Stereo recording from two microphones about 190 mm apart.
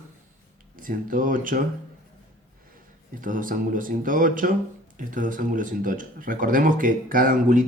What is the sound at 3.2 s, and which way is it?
Speech, 45° right (ahead or behind).